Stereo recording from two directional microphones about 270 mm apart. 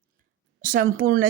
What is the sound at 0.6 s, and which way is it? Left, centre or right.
Speech, right.